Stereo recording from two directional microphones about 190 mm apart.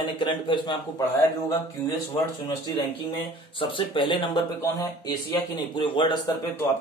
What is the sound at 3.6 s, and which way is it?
Speech, 25° left (ahead or behind).